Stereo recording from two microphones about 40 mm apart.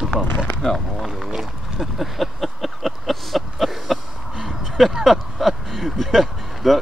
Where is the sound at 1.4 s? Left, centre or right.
Centre.